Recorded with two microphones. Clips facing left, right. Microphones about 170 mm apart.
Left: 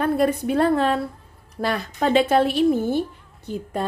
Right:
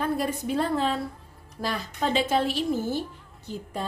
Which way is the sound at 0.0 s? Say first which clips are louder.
Left 7 dB; 65° left (ahead or behind).